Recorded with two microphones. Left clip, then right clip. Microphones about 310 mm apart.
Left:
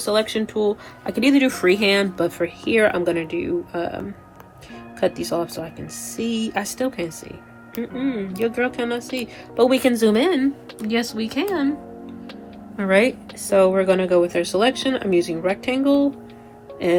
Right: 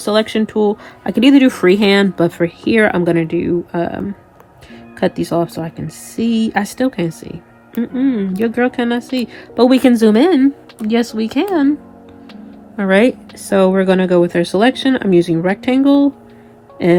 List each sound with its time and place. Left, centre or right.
0.1 s speech: right
5.2 s speech: right
12.7 s speech: right